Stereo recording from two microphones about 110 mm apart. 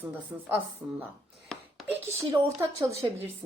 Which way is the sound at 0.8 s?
20° right (ahead or behind).